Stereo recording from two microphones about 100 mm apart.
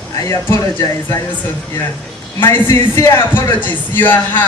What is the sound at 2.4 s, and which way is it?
Speech, 20° left (ahead or behind).